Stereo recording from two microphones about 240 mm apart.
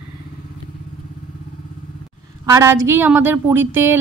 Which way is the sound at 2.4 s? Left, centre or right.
Centre.